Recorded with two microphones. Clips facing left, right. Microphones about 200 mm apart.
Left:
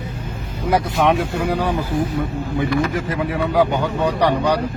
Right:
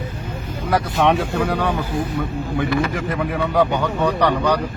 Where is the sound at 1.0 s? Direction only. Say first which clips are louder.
Even; centre (ahead or behind).